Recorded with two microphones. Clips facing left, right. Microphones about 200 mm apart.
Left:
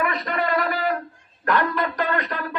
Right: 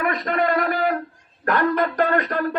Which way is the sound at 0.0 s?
50° right (ahead or behind).